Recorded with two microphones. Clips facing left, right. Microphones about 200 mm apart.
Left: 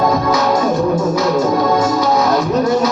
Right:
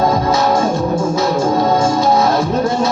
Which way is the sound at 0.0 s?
25° right (ahead or behind).